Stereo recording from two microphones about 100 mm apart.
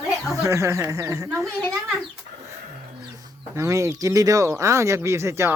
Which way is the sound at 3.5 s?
30° right (ahead or behind).